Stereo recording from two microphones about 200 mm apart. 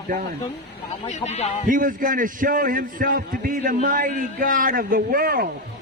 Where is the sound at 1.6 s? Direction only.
40° right (ahead or behind).